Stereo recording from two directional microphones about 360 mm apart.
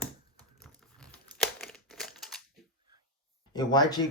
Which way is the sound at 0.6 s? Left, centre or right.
Centre.